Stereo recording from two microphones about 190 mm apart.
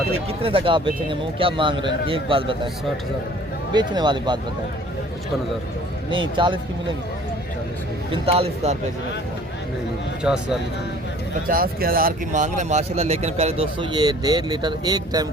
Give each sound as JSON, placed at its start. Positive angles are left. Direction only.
{"t": 0.3, "sound": "a man's voice", "side_deg": -30}
{"t": 3.7, "sound": "a man's voice", "side_deg": -25}
{"t": 6.3, "sound": "a man's voice", "side_deg": -25}
{"t": 8.1, "sound": "speech", "side_deg": -30}
{"t": 10.2, "sound": "speech", "side_deg": -5}
{"t": 11.4, "sound": "speech", "side_deg": -50}